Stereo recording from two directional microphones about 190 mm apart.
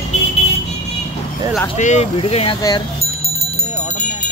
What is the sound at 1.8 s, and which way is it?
Speech, 35° left (ahead or behind).